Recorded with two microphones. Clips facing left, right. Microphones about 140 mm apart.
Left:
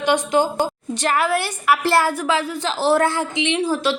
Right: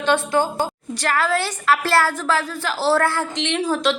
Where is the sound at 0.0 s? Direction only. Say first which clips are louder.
Left 1 dB; 15° left (ahead or behind).